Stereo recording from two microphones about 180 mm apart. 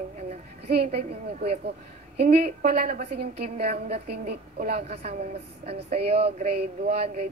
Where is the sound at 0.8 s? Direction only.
35° right (ahead or behind).